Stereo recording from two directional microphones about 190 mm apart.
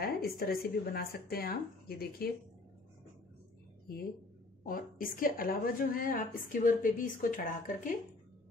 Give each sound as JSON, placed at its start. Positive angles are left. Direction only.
{"t": 0.0, "sound": "a woman's voice", "side_deg": 50}
{"t": 4.6, "sound": "a woman's voice", "side_deg": 50}